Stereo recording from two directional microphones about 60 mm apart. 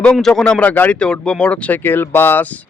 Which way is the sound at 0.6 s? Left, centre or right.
Left.